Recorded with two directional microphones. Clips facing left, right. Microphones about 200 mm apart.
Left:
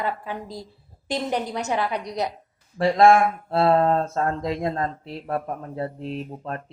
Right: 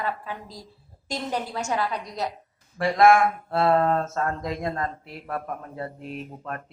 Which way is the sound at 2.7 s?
30° left (ahead or behind).